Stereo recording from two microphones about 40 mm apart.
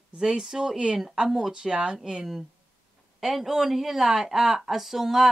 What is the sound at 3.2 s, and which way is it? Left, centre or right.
Speech, centre.